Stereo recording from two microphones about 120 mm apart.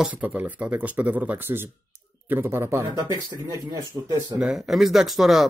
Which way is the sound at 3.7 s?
35° right (ahead or behind).